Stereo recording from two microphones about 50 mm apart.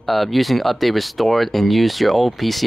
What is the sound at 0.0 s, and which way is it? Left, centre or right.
Speech, centre.